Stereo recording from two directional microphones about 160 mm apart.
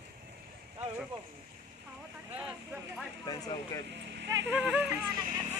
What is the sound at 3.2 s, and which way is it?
Speech, 25° left (ahead or behind).